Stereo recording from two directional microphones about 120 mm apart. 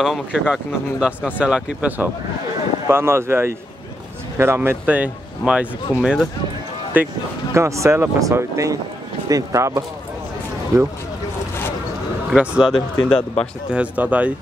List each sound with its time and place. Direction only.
0.0 s speech: 5° right (ahead or behind); by 9.8 s 25° right (ahead or behind)
12.3 s speech: 5° right (ahead or behind)
12.7 s speech: 50° left (ahead or behind)
13.7 s speech: 10° right (ahead or behind)